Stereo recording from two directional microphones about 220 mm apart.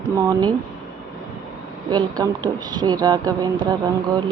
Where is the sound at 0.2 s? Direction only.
15° right (ahead or behind).